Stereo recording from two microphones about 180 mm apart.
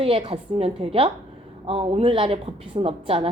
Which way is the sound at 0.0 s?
30° right (ahead or behind).